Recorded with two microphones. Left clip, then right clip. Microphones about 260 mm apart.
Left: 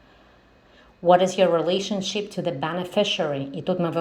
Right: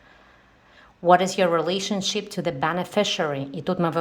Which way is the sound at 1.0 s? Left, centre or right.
Right.